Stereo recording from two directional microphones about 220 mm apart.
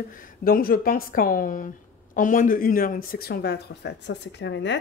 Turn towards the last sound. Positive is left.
turn(degrees=55)  # may be behind; listen again after turning